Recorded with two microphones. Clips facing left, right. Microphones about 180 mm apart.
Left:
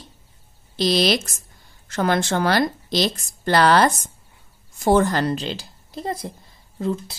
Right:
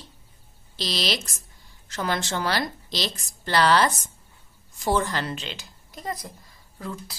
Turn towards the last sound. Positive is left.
turn(degrees=25)  # may be behind; listen again after turning